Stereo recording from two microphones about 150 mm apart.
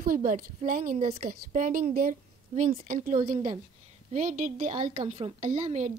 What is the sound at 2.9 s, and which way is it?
A woman's voice, 65° right (ahead or behind).